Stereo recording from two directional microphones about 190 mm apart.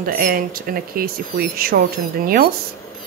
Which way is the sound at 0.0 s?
50° right (ahead or behind).